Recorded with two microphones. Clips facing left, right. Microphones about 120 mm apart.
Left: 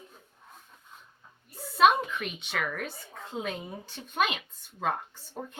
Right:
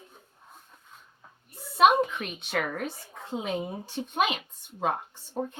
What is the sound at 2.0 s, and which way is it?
Speech, 35° right (ahead or behind).